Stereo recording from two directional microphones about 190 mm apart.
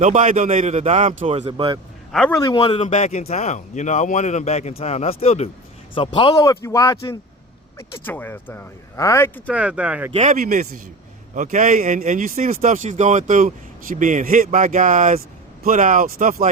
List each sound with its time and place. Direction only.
0.0 s a man's voice: 40° right (ahead or behind)
2.1 s a man's voice: 5° left (ahead or behind)
2.4 s speech: 25° left (ahead or behind)
9.5 s speech: 5° right (ahead or behind)
10.1 s speech: 30° right (ahead or behind)
10.3 s speech: 45° right (ahead or behind)